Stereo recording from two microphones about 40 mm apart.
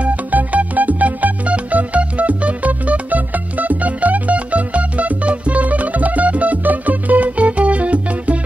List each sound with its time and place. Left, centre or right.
0.0 s music: right